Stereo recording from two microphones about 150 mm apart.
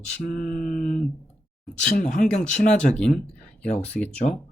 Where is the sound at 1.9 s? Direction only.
65° left (ahead or behind).